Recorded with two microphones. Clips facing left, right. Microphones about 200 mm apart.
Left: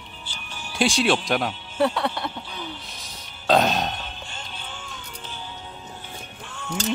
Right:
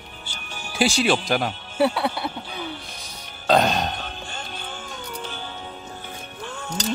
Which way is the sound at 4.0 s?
45° right (ahead or behind).